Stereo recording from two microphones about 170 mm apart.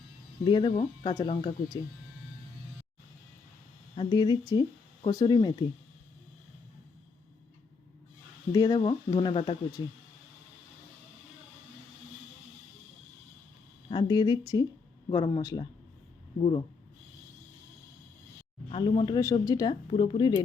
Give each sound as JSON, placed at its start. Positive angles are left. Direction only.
{"t": 0.4, "sound": "speech", "side_deg": 30}
{"t": 3.9, "sound": "speech", "side_deg": 25}
{"t": 8.5, "sound": "speech", "side_deg": 20}
{"t": 13.9, "sound": "speech", "side_deg": 25}
{"t": 18.7, "sound": "speech", "side_deg": 30}